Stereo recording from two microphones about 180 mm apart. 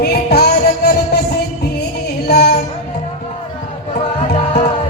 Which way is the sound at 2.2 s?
65° left (ahead or behind).